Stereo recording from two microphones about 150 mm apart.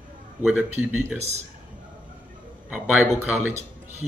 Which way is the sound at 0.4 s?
10° right (ahead or behind).